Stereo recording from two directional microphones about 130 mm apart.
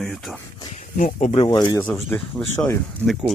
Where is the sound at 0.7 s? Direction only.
80° left.